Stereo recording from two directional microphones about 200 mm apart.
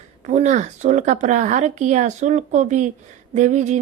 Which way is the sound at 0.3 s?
35° right (ahead or behind).